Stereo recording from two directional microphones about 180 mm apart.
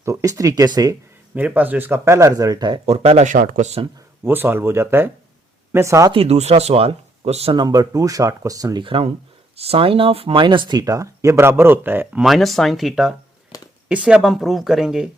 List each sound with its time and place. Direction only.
0.0 s speech: 15° right (ahead or behind)
1.4 s speech: 10° right (ahead or behind); by 3.8 s 40° right (ahead or behind)
4.2 s speech: 10° right (ahead or behind)
6.1 s speech: 35° right (ahead or behind)
7.5 s speech: 20° right (ahead or behind)
12.2 s speech: centre (ahead or behind)
13.5 s a sound: 20° left (ahead or behind)
13.8 s speech: 5° right (ahead or behind)